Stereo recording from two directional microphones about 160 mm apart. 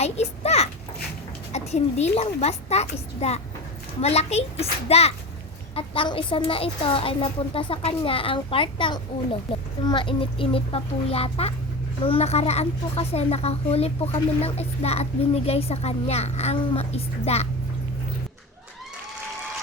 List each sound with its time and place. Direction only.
0.0 s a child's voice: 40° left (ahead or behind)